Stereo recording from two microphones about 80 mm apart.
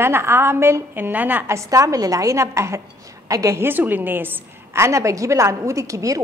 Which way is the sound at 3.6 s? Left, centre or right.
Right.